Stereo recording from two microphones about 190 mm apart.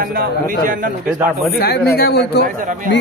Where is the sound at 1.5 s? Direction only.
55° left (ahead or behind).